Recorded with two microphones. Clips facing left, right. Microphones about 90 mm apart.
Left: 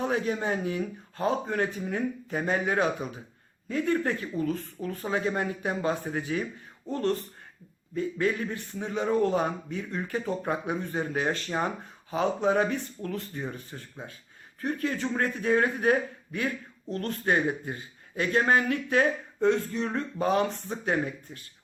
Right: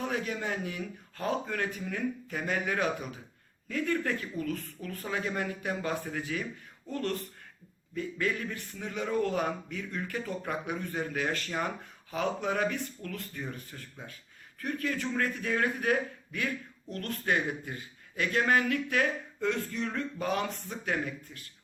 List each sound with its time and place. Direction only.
0.0 s a man's voice: 30° left (ahead or behind)